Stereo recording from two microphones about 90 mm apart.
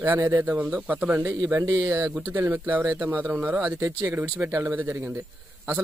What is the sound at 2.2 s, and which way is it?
Speech, 25° right (ahead or behind).